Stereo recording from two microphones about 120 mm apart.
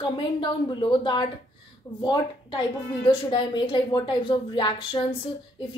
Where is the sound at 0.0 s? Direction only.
45° left (ahead or behind).